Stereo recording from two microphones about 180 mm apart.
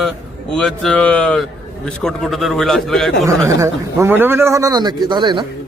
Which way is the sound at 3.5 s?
15° right (ahead or behind).